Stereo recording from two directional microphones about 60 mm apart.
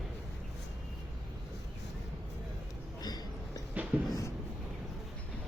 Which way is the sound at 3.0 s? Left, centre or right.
Left.